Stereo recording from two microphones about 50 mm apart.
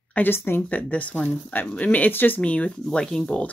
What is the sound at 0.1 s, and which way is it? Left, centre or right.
Speech, left.